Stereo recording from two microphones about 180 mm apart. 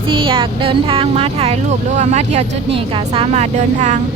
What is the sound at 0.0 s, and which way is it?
Speech, 30° right (ahead or behind).